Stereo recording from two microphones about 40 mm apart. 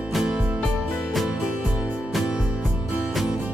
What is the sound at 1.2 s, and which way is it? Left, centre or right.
Music, centre.